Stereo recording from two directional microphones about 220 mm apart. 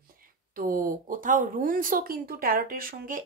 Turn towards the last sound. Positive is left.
turn(degrees=-40)  # may be behind; listen again after turning